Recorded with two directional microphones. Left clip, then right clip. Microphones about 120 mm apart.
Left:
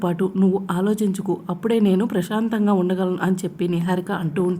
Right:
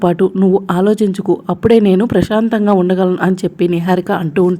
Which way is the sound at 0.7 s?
35° right (ahead or behind).